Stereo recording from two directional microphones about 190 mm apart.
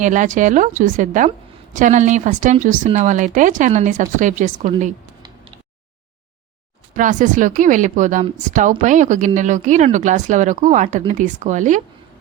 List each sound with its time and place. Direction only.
0.0 s speech: 40° right (ahead or behind)
6.9 s speech: 40° right (ahead or behind)